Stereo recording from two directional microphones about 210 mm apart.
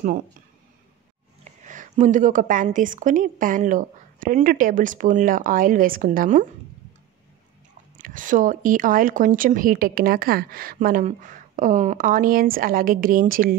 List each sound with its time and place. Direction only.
1.6 s speech: 35° right (ahead or behind)
8.0 s speech: 40° right (ahead or behind)